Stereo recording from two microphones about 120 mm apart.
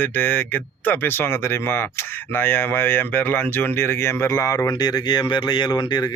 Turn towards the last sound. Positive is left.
turn(degrees=35)  # may be behind; listen again after turning